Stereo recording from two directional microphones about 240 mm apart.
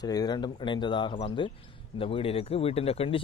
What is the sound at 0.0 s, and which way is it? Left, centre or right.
Speech, centre.